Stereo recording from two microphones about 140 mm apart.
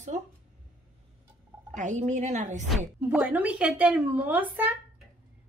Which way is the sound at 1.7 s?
60° right (ahead or behind).